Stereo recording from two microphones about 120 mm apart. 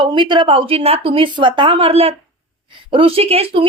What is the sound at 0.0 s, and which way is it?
Speech, 40° right (ahead or behind).